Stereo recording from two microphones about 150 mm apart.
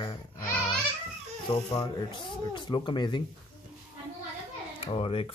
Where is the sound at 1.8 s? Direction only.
30° left (ahead or behind).